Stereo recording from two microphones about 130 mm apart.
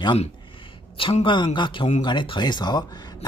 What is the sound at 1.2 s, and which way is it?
Speech, 35° left (ahead or behind).